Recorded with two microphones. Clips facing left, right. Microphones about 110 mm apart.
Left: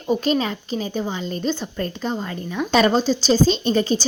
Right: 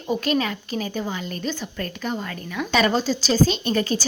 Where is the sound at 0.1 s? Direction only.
25° left (ahead or behind).